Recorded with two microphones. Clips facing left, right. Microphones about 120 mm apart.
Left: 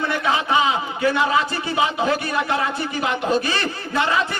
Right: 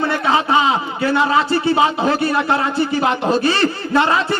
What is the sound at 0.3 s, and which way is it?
A man's voice, 35° right (ahead or behind).